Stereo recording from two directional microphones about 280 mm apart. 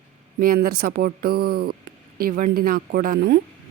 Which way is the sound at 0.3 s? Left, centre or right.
Right.